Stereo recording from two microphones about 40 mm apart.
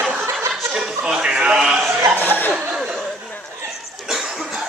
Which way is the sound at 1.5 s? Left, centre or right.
Centre.